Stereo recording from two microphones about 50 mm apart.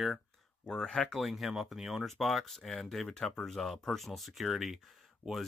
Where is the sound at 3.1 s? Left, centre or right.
Centre.